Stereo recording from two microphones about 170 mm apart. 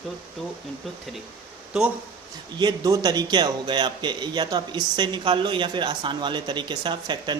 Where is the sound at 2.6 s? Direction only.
25° right (ahead or behind).